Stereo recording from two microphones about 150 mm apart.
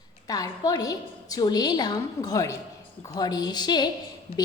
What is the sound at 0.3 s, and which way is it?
A woman's voice, 25° left (ahead or behind).